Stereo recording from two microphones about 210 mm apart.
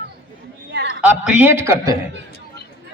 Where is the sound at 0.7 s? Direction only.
55° right (ahead or behind).